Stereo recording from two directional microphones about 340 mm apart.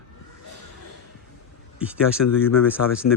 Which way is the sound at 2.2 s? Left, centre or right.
Left.